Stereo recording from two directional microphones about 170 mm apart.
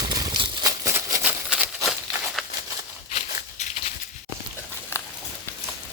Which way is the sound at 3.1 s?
45° left (ahead or behind).